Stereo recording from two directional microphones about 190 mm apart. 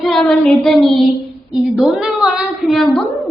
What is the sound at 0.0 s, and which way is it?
A woman's voice, centre (ahead or behind).